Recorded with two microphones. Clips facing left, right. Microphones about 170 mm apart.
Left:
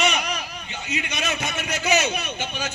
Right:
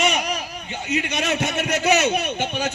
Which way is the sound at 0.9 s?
55° right (ahead or behind).